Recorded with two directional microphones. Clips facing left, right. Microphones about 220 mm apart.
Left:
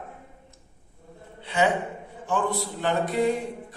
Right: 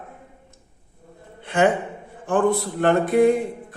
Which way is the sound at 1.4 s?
50° right (ahead or behind).